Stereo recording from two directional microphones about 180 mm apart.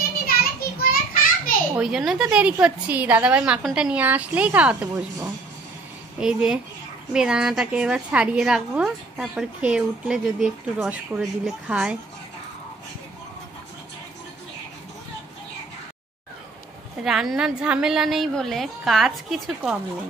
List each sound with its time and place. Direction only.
0.4 s children playing: 55° left (ahead or behind)
1.8 s a woman's voice: 5° right (ahead or behind)
17.0 s a woman's voice: 5° right (ahead or behind)